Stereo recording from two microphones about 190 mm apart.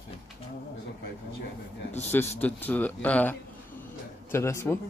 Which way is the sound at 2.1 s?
10° left (ahead or behind).